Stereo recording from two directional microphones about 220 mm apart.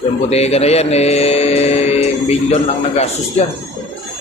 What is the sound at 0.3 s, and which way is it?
Mantra, 30° left (ahead or behind).